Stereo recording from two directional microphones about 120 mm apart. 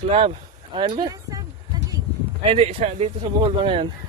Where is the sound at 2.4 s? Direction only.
50° right (ahead or behind).